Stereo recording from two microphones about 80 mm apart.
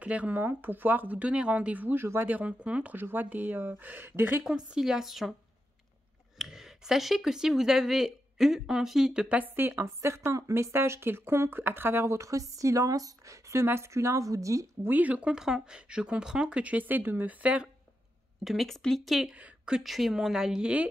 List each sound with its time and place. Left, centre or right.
0.0 s speech: centre
4.5 s speech: centre
6.3 s speech: centre
9.4 s a woman's voice: right
14.9 s speech: centre
18.4 s speech: centre
19.3 s a woman's voice: centre
19.8 s speech: centre